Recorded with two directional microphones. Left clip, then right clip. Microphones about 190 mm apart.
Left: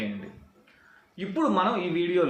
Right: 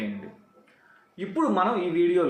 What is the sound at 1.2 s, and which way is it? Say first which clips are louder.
Speech: right 1 dB; centre (ahead or behind).